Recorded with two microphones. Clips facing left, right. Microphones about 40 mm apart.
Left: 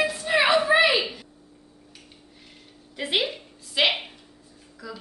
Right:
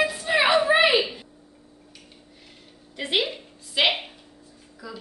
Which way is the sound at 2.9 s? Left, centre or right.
Centre.